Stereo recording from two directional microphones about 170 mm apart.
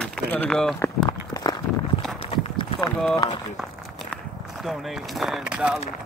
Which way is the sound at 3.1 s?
20° left (ahead or behind).